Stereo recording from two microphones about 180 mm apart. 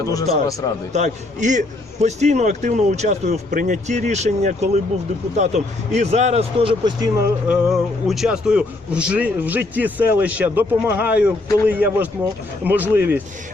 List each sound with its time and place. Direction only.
0.0 s a man's voice: 20° left (ahead or behind)
0.9 s a man's voice: 40° right (ahead or behind)
7.4 s a man's voice: 5° right (ahead or behind)